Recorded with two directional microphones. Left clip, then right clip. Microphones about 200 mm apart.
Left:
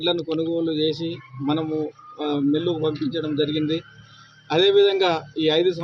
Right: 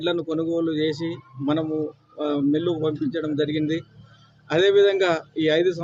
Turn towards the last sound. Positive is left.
turn(degrees=-5)  # may be behind; listen again after turning